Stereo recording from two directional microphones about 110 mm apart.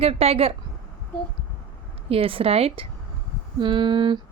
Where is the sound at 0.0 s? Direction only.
65° right (ahead or behind).